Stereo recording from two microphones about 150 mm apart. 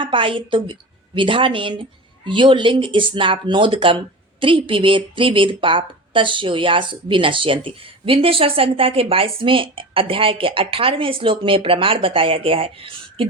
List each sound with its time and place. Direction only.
0.0 s a woman's voice: 35° right (ahead or behind)